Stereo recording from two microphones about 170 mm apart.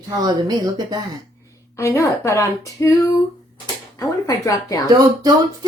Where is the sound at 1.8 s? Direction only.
15° left (ahead or behind).